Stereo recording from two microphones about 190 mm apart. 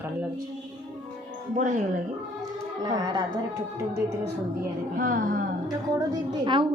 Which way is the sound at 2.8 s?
20° right (ahead or behind).